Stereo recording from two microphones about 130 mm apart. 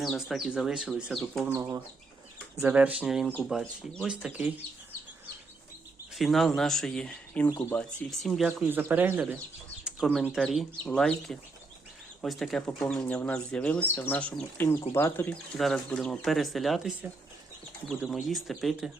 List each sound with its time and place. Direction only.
0.0 s speech: centre (ahead or behind)
1.5 s speech: 20° right (ahead or behind)
6.1 s speech: centre (ahead or behind)
8.6 s speech: 15° right (ahead or behind)
9.8 s bird: centre (ahead or behind)
10.3 s speech: centre (ahead or behind); by 15.4 s 15° left (ahead or behind)
15.5 s speech: 5° left (ahead or behind)